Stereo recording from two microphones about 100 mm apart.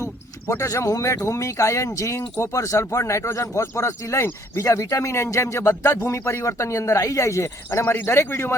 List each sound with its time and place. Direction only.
0.4 s speech: 30° left (ahead or behind)